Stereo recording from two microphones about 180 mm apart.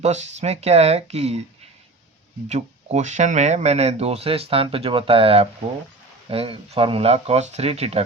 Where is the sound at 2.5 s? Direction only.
40° right (ahead or behind).